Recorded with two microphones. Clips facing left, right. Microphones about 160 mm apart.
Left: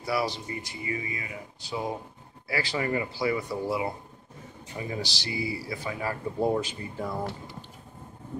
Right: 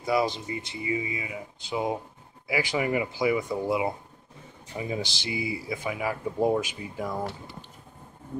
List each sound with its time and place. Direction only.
0.0 s speech: 20° right (ahead or behind)